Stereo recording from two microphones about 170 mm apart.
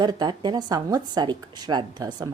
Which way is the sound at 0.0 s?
25° right (ahead or behind).